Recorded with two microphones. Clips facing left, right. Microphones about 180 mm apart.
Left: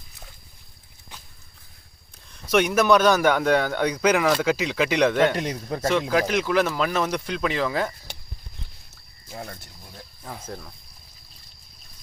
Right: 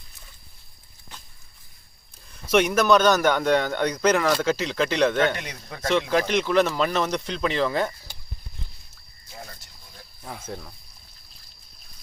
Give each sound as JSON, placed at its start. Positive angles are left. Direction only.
{"t": 2.3, "sound": "a man's voice", "side_deg": 0}
{"t": 5.4, "sound": "speech", "side_deg": 40}
{"t": 5.9, "sound": "speech", "side_deg": 5}
{"t": 9.3, "sound": "speech", "side_deg": 50}
{"t": 10.2, "sound": "speech", "side_deg": 0}